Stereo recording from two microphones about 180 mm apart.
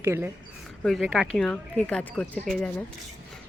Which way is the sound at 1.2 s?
5° left (ahead or behind).